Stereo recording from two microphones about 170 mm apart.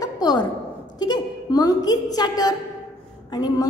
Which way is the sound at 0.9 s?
25° left (ahead or behind).